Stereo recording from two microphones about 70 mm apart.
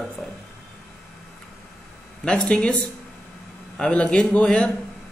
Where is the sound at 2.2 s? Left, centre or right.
Centre.